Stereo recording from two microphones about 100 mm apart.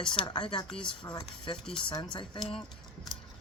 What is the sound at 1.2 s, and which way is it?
Speech, 60° left (ahead or behind).